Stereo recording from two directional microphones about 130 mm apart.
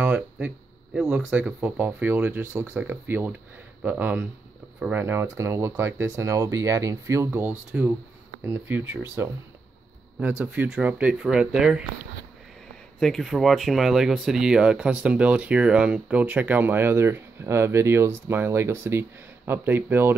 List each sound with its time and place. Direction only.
0.0 s a sound: 15° right (ahead or behind)
0.9 s speech: 5° right (ahead or behind)
13.0 s speech: centre (ahead or behind); by 20.2 s 15° right (ahead or behind)